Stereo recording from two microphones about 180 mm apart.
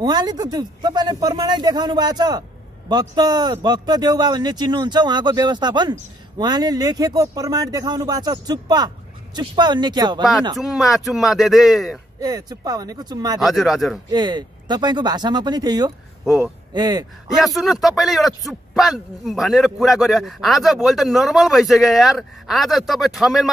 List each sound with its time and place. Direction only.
0.0 s a man's voice: 25° right (ahead or behind)
10.6 s a man's voice: centre (ahead or behind)
12.2 s a man's voice: 20° right (ahead or behind)
13.4 s a man's voice: centre (ahead or behind)
14.1 s a man's voice: 25° right (ahead or behind)
16.3 s speech: 10° right (ahead or behind)
16.7 s a man's voice: 20° right (ahead or behind)
17.4 s a man's voice: centre (ahead or behind)